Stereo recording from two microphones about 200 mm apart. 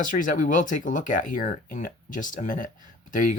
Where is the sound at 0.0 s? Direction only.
40° left (ahead or behind).